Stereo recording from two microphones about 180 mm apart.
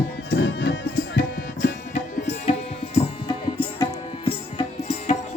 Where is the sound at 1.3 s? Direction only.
50° left (ahead or behind).